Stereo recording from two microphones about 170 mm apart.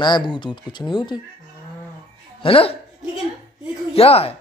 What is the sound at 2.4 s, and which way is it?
Speech, 35° left (ahead or behind).